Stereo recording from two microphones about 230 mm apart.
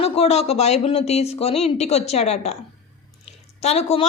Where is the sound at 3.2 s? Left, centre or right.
Left.